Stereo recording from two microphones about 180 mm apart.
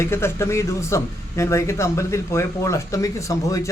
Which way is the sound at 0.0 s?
15° left (ahead or behind).